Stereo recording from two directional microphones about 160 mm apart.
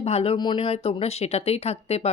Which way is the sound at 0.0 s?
40° left (ahead or behind).